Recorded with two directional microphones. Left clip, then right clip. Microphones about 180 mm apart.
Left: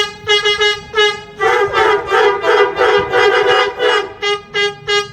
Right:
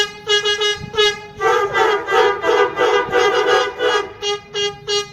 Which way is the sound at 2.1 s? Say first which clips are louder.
Left 3 dB; 25° right (ahead or behind).